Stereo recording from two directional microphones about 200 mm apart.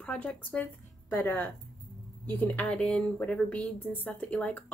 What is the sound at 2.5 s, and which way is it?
A woman's voice, 5° left (ahead or behind).